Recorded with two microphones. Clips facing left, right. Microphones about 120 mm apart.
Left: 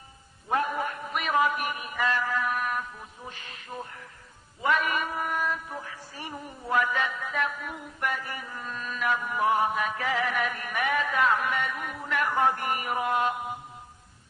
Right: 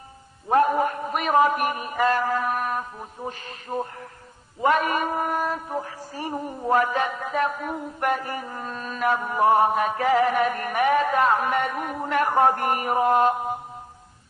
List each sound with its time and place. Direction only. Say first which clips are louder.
0.5 s mantra: right 8 dB; 50° right (ahead or behind)